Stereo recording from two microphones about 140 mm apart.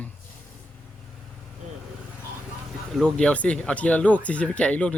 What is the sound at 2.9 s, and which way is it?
Speech, 5° left (ahead or behind).